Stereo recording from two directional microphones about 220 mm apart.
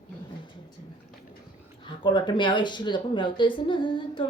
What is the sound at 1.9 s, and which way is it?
A woman's voice, 20° left (ahead or behind).